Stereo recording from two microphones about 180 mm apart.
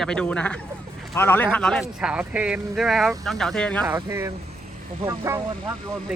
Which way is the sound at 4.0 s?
15° right (ahead or behind).